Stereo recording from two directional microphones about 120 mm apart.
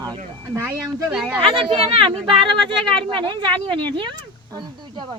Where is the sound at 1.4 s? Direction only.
45° right (ahead or behind).